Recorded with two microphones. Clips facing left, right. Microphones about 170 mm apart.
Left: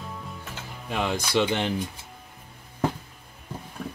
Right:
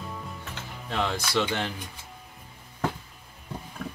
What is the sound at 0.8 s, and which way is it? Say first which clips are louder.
Speech: left 1 dB; 15° left (ahead or behind).